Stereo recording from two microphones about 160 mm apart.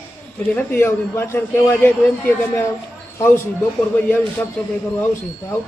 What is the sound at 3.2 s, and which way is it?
Speech, 15° left (ahead or behind).